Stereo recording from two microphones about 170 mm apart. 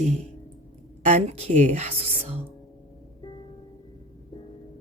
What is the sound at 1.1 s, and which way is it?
Speech, 40° right (ahead or behind).